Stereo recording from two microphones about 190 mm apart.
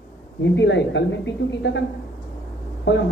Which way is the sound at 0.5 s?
70° left (ahead or behind).